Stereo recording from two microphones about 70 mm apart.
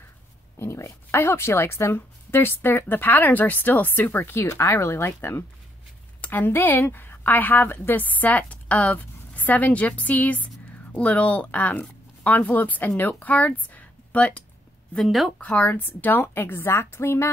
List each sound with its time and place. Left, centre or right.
0.6 s a woman's voice: left; by 14.4 s centre
15.0 s speech: centre
15.3 s speech: centre; by 17.3 s left